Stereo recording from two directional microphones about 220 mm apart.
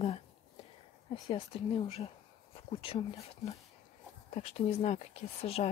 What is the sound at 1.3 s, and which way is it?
Speech, 25° left (ahead or behind).